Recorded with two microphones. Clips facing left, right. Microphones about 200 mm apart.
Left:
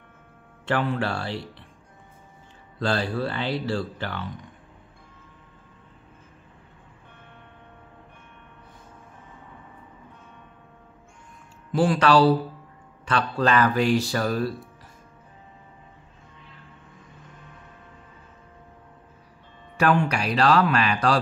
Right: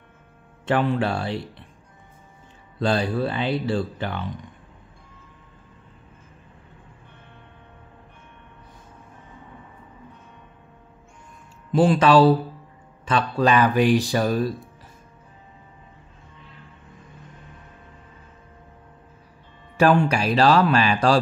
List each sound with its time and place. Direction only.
0.7 s speech: 20° right (ahead or behind)
2.8 s speech: 20° right (ahead or behind)
11.7 s speech: 20° right (ahead or behind)
19.8 s speech: 30° right (ahead or behind)